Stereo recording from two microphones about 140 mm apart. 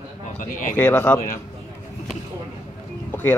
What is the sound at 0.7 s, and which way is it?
Speech, 10° left (ahead or behind).